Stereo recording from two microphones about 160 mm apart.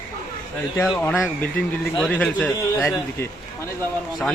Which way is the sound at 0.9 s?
10° left (ahead or behind).